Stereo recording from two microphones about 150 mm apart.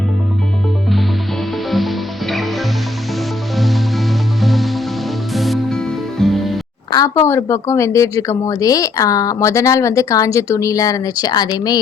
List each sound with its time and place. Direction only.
1.7 s music: centre (ahead or behind)
7.3 s speech: 20° left (ahead or behind)